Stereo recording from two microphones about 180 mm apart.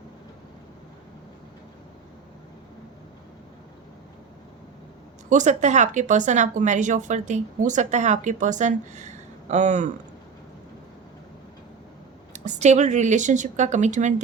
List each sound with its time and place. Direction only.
5.3 s speech: 45° right (ahead or behind)
12.3 s a woman's voice: 40° right (ahead or behind)